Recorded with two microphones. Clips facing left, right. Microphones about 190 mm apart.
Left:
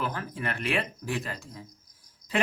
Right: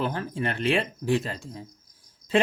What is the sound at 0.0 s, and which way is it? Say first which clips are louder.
Speech: right 4 dB; 30° right (ahead or behind).